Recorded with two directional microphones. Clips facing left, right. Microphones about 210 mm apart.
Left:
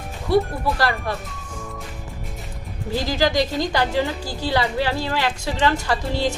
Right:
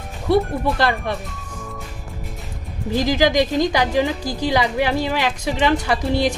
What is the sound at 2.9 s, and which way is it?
A woman's voice, 15° right (ahead or behind).